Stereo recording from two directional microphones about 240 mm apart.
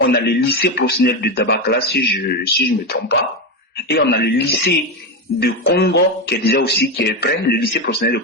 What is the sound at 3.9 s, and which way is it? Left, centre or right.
Speech, left.